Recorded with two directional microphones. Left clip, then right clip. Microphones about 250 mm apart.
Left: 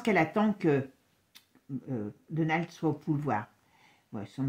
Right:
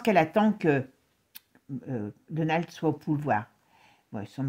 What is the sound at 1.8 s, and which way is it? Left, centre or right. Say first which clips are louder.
Speech: right 3 dB; right.